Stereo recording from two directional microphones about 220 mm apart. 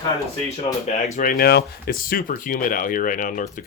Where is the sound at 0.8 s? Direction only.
40° left (ahead or behind).